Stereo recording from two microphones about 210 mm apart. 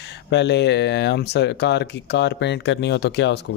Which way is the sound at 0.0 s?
55° left (ahead or behind).